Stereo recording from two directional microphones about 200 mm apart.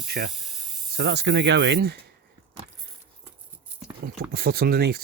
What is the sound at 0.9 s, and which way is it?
Speech, 55° right (ahead or behind).